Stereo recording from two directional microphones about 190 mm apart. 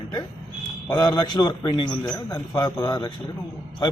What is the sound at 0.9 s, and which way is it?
A man's voice, 20° left (ahead or behind).